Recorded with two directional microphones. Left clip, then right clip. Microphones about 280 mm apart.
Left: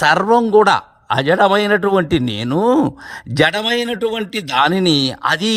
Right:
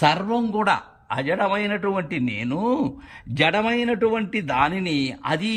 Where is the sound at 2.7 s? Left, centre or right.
Left.